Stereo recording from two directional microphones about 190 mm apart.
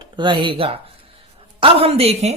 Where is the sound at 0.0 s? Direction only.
25° right (ahead or behind).